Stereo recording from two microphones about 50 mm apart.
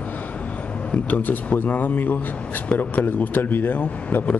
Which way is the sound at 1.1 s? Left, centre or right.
Left.